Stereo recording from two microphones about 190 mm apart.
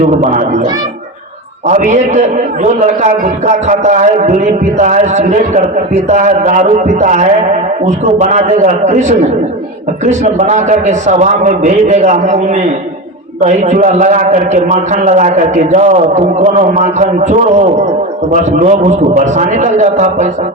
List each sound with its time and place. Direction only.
0.1 s a man's voice: 40° right (ahead or behind)